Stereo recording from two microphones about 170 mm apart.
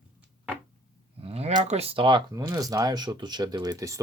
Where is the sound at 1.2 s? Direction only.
35° right (ahead or behind).